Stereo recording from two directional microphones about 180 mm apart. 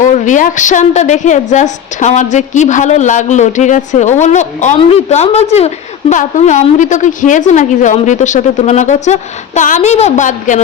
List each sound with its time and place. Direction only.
0.0 s a woman's voice: 45° left (ahead or behind)